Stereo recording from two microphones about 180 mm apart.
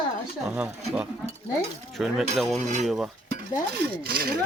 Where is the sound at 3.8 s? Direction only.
55° right (ahead or behind).